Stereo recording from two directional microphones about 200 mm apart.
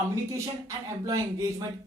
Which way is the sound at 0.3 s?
15° right (ahead or behind).